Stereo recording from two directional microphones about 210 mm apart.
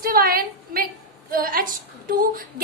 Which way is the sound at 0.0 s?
45° right (ahead or behind).